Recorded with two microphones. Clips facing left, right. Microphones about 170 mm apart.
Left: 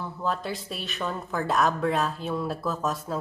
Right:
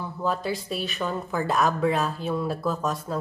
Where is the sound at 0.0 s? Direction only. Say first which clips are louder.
Right 2 dB; centre (ahead or behind).